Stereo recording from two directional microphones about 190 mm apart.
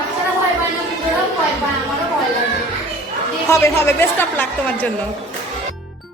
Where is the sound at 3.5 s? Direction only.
15° left (ahead or behind).